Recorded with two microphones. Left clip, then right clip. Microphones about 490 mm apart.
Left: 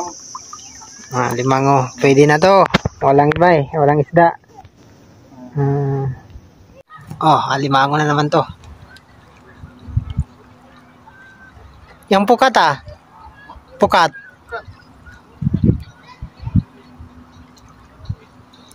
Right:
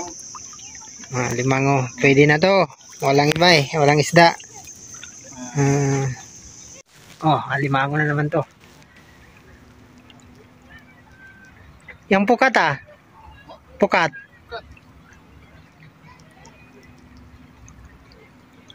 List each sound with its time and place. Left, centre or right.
1.1 s speech: right
5.5 s speech: right
7.2 s speech: right
12.1 s speech: right
13.7 s a sound: right